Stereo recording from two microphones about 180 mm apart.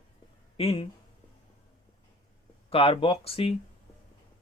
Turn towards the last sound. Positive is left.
turn(degrees=35)  # may be behind; listen again after turning